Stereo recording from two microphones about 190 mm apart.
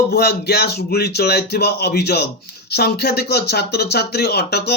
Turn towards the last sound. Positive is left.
turn(degrees=55)  # may be behind; listen again after turning